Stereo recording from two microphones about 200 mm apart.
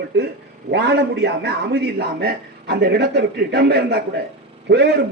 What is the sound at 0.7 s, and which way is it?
A man's voice, 60° right (ahead or behind).